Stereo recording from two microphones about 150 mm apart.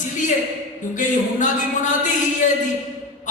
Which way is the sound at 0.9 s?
55° left (ahead or behind).